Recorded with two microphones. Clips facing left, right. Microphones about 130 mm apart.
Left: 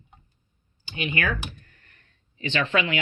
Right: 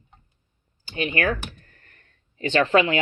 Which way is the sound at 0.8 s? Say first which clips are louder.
Right 4 dB; 35° right (ahead or behind).